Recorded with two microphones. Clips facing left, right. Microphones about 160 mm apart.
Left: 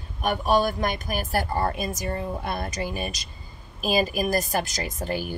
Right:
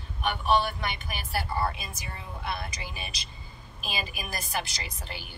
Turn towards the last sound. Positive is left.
turn(degrees=45)  # may be behind; listen again after turning